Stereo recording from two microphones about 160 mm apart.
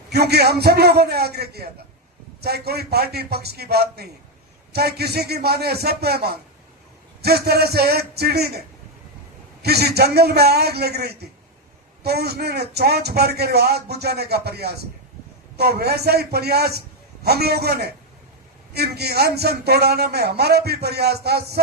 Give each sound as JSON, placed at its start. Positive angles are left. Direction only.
{"t": 0.1, "sound": "a man's voice", "side_deg": -90}
{"t": 9.6, "sound": "a man's voice", "side_deg": -90}